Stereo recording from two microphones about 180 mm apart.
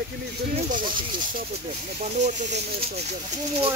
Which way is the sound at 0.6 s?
45° right (ahead or behind).